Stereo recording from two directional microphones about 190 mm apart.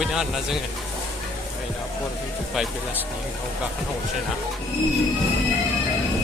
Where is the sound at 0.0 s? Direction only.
Centre (ahead or behind).